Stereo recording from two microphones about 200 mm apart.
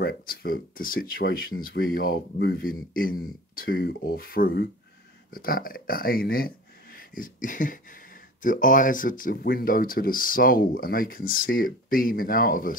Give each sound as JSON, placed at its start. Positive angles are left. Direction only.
{"t": 0.0, "sound": "speech", "side_deg": 50}
{"t": 7.2, "sound": "a sound", "side_deg": 40}
{"t": 8.4, "sound": "speech", "side_deg": 40}